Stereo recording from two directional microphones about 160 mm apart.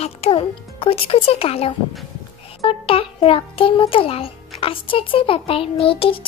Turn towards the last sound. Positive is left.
turn(degrees=35)  # may be behind; listen again after turning